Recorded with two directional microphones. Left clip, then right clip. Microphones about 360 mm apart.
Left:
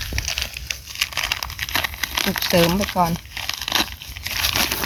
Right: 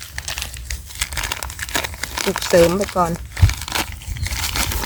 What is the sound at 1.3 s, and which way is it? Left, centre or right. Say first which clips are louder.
Crumpling: left 1 dB; centre.